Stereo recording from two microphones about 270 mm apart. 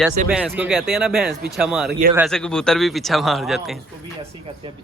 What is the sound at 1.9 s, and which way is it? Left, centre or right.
Speech, right.